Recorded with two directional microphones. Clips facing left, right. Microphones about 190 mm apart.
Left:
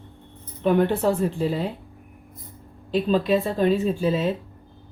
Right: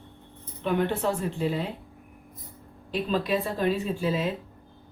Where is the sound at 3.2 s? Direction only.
25° left (ahead or behind).